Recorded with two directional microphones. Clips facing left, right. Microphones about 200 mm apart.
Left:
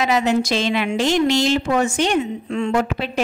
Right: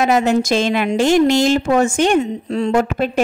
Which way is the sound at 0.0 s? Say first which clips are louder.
Right 3 dB; 50° right (ahead or behind).